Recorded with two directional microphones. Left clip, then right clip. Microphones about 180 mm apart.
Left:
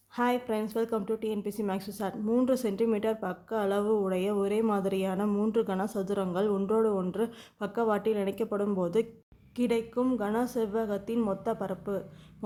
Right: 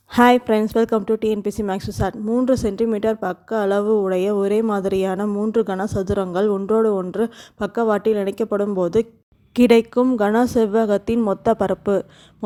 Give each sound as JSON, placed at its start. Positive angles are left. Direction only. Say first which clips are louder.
{"t": 0.1, "sound": "a woman's voice", "louder": "right 15 dB", "side_deg": -55}
{"t": 2.2, "sound": "speech", "louder": "right 8 dB", "side_deg": -25}
{"t": 9.6, "sound": "a woman's voice", "louder": "right 14 dB", "side_deg": -50}